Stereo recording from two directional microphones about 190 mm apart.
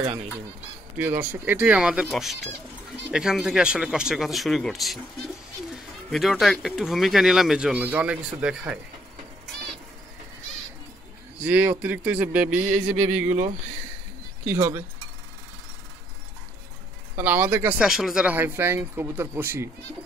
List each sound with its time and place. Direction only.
0.9 s speech: 10° right (ahead or behind)
11.4 s speech: 10° right (ahead or behind)
12.7 s music: 40° right (ahead or behind)
14.4 s speech: 10° right (ahead or behind)
17.2 s speech: 10° right (ahead or behind)